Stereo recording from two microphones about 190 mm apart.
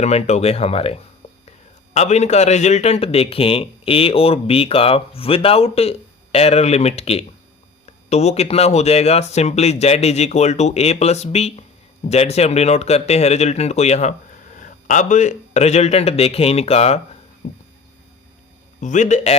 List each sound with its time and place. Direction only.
0.0 s a man's voice: 35° left (ahead or behind)
18.8 s a man's voice: 40° left (ahead or behind)